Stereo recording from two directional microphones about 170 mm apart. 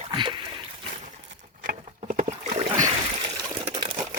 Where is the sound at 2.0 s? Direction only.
50° right (ahead or behind).